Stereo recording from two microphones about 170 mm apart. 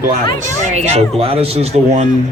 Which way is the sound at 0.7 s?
40° right (ahead or behind).